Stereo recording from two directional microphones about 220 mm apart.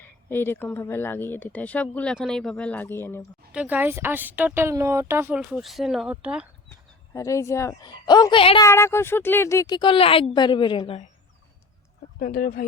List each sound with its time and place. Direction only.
0.0 s speech: 10° left (ahead or behind)
3.5 s speech: 5° right (ahead or behind)
6.7 s a woman's voice: 15° left (ahead or behind)
12.2 s speech: 45° left (ahead or behind)